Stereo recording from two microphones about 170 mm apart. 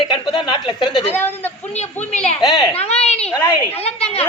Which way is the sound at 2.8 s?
40° left (ahead or behind).